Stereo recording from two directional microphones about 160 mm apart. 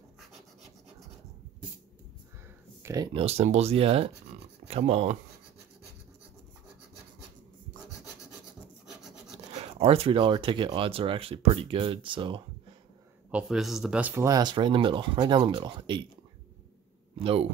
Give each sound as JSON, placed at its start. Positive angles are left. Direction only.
{"t": 2.8, "sound": "speech", "side_deg": -20}
{"t": 3.1, "sound": "speech", "side_deg": -35}
{"t": 8.8, "sound": "rub", "side_deg": -5}
{"t": 9.8, "sound": "speech", "side_deg": -35}
{"t": 13.3, "sound": "speech", "side_deg": -5}
{"t": 17.2, "sound": "speech", "side_deg": -35}